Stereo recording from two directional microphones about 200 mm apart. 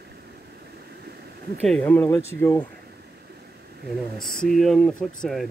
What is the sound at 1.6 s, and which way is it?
Speech, 5° left (ahead or behind).